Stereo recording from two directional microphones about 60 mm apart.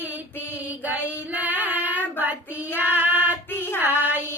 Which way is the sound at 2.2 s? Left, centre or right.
Right.